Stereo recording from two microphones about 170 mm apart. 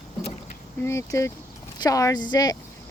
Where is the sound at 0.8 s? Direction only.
15° left (ahead or behind).